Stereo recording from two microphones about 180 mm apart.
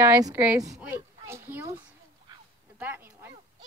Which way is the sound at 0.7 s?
10° right (ahead or behind).